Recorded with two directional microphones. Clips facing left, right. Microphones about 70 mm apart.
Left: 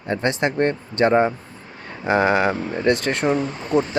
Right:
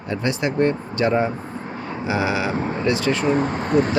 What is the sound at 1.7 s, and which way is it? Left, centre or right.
Vehicle, right.